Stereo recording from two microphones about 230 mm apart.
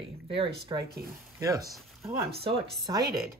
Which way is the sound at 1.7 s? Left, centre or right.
Centre.